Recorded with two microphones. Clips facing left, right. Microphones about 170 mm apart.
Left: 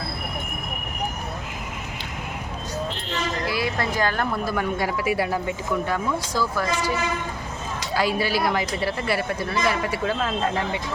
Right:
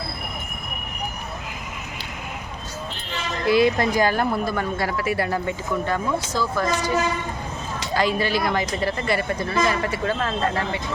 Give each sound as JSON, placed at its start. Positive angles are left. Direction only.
{"t": 3.4, "sound": "speech", "side_deg": -20}
{"t": 4.4, "sound": "speech", "side_deg": 10}
{"t": 7.9, "sound": "speech", "side_deg": 5}